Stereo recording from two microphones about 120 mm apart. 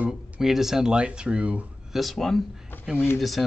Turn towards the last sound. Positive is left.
turn(degrees=20)  # may be behind; listen again after turning